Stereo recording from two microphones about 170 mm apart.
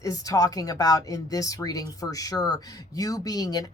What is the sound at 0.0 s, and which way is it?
Speech, 20° left (ahead or behind).